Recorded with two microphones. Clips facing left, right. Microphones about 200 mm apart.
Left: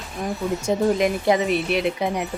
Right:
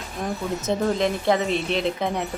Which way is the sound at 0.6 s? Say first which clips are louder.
Left 3 dB; 10° left (ahead or behind).